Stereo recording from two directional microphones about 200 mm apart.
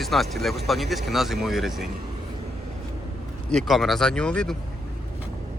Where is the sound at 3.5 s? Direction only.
Centre (ahead or behind).